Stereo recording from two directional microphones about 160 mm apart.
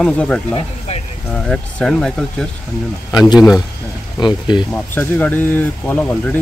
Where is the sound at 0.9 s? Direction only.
45° left (ahead or behind).